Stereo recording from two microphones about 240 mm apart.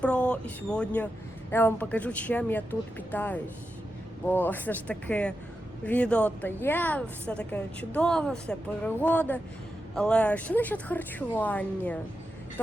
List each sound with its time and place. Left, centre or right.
0.0 s a woman's voice: centre